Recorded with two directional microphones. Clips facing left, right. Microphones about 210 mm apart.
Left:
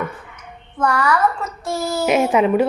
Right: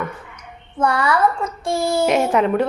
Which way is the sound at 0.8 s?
30° right (ahead or behind).